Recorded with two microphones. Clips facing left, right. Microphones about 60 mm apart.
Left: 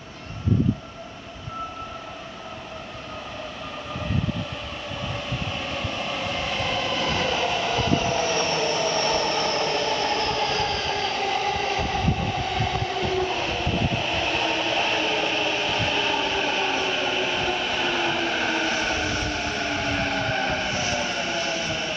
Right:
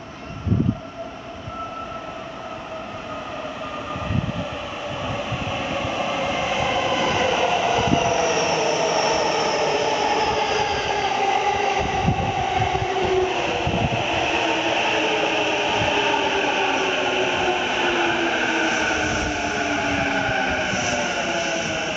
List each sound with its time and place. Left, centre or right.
5.1 s train: centre